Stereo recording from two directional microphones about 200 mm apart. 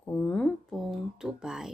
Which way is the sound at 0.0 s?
10° left (ahead or behind).